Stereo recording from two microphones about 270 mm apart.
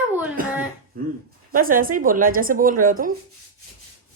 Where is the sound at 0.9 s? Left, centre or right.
Right.